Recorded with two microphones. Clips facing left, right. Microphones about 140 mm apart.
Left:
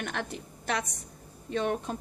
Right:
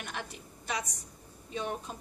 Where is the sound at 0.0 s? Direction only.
60° left (ahead or behind).